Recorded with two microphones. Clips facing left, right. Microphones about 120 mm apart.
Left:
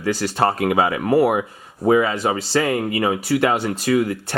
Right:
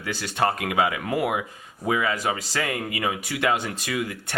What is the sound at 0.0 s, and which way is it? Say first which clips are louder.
Speech: left 5 dB; 40° left (ahead or behind).